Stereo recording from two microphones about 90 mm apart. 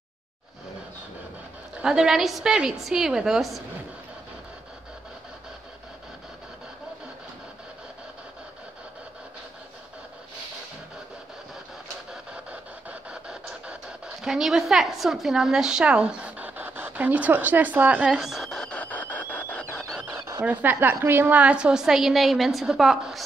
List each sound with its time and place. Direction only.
1.8 s a woman's voice: 5° right (ahead or behind)
12.1 s printer: 10° right (ahead or behind)
13.1 s speech: 10° right (ahead or behind)
18.1 s squeal: 5° right (ahead or behind); by 19.9 s 15° left (ahead or behind)
20.4 s a woman's voice: 20° right (ahead or behind); by 23.2 s centre (ahead or behind)